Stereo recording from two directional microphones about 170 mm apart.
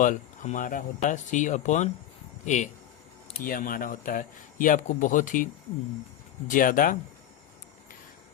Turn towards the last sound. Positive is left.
turn(degrees=55)  # may be behind; listen again after turning